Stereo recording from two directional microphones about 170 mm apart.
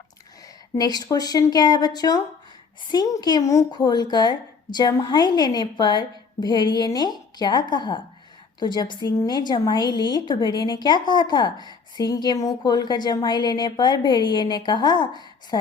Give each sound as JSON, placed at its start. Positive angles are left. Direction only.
{"t": 0.8, "sound": "a woman's voice", "side_deg": 25}